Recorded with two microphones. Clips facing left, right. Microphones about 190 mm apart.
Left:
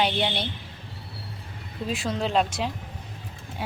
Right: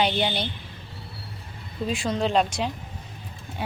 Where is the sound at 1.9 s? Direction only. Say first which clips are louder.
Right 2 dB; 5° left (ahead or behind).